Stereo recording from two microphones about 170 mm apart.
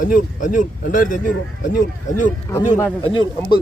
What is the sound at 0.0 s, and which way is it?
Speech, 50° left (ahead or behind).